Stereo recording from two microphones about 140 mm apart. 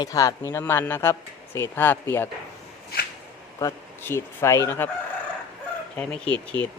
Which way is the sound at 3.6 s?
15° left (ahead or behind).